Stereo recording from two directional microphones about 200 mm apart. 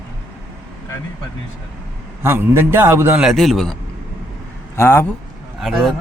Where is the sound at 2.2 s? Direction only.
10° right (ahead or behind).